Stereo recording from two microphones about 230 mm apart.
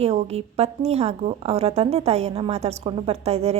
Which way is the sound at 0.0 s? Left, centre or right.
Right.